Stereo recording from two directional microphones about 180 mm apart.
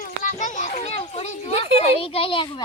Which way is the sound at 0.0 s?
45° left (ahead or behind).